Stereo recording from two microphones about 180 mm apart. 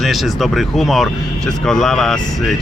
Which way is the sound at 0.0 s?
Centre (ahead or behind).